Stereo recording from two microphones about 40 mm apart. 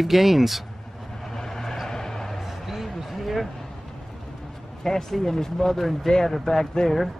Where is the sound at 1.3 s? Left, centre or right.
Centre.